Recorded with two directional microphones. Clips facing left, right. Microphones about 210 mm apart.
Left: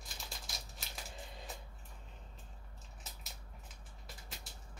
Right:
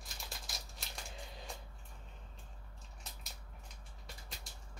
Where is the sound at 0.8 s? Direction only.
5° left (ahead or behind).